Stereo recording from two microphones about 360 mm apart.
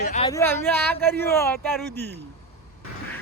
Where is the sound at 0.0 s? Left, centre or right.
Centre.